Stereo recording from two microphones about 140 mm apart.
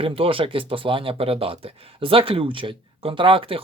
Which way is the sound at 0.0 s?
40° right (ahead or behind).